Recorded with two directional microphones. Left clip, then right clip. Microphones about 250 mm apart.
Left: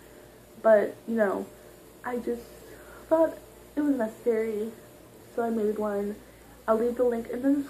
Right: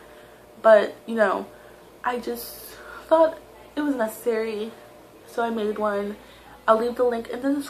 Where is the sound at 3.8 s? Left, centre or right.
Centre.